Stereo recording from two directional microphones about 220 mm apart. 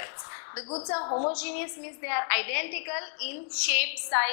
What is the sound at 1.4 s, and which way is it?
A woman's voice, 15° left (ahead or behind).